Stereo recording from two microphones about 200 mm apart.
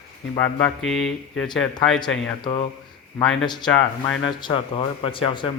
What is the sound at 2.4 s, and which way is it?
Speech, 25° left (ahead or behind).